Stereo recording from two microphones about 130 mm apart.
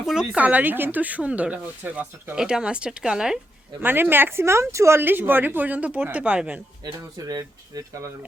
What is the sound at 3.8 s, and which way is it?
Speech, 15° right (ahead or behind).